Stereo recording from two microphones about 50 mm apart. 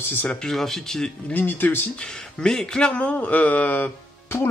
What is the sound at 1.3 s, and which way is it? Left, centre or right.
Speech, left.